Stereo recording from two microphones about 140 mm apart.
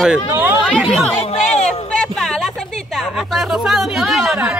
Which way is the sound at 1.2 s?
55° left (ahead or behind).